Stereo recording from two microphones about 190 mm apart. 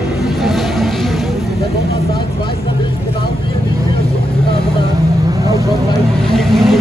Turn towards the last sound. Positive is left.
turn(degrees=0)  # may be behind; listen again after turning